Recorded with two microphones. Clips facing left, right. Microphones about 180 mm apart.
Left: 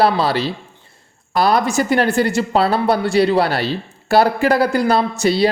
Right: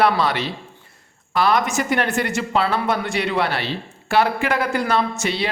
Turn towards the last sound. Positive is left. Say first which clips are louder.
# left 7 dB
turn(degrees=35)  # may be behind; listen again after turning